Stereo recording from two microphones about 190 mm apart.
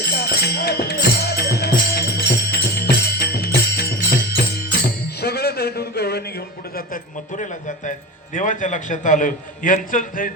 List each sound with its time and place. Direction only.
0.0 s music: 55° left (ahead or behind)
6.7 s a sound: 45° left (ahead or behind)
7.9 s a man's voice: 45° left (ahead or behind)